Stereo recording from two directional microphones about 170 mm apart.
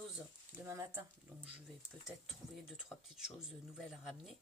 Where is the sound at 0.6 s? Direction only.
20° right (ahead or behind).